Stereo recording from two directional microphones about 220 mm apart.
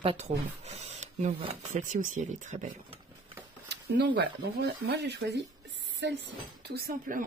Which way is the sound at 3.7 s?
45° right (ahead or behind).